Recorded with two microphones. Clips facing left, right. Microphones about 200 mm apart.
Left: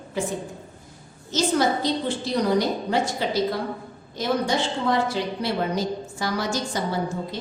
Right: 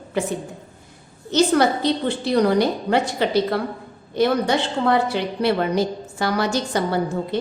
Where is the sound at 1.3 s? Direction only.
65° right (ahead or behind).